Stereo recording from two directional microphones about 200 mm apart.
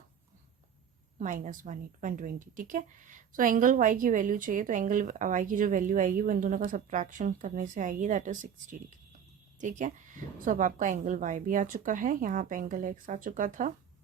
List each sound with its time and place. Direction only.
1.2 s a woman's voice: 40° right (ahead or behind)